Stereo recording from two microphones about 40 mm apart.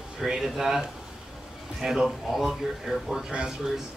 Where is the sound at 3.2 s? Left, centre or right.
Right.